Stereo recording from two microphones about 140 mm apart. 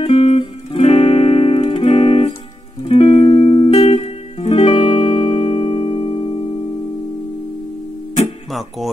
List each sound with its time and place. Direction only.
0.0 s music: 45° left (ahead or behind)
8.5 s music: centre (ahead or behind)